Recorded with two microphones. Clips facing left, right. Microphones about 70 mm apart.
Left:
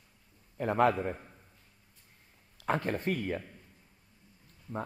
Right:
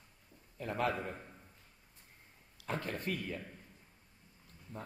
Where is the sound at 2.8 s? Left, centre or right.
Left.